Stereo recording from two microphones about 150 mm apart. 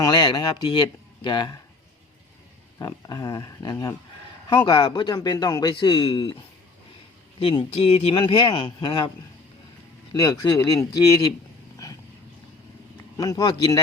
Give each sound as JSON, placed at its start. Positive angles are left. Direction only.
{"t": 0.0, "sound": "speech", "side_deg": 30}
{"t": 2.7, "sound": "speech", "side_deg": 25}
{"t": 7.3, "sound": "speech", "side_deg": 35}
{"t": 10.1, "sound": "speech", "side_deg": 25}
{"t": 13.1, "sound": "speech", "side_deg": 25}